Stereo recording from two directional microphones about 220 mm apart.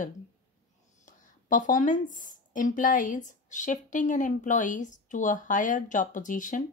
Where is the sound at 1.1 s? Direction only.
35° left (ahead or behind).